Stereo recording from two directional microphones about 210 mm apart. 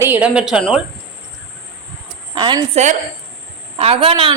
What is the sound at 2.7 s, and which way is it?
A woman's voice, 35° right (ahead or behind).